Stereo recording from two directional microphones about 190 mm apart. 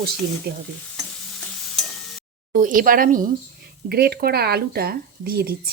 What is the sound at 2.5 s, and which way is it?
Speech, 45° right (ahead or behind).